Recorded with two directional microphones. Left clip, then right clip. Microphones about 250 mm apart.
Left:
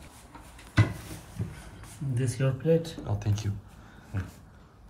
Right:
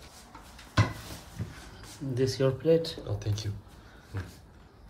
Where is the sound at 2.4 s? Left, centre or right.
Right.